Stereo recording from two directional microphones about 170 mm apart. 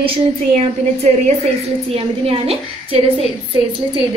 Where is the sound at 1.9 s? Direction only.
35° right (ahead or behind).